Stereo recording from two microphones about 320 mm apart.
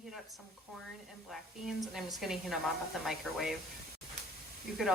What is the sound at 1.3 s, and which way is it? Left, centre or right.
A woman's voice, centre.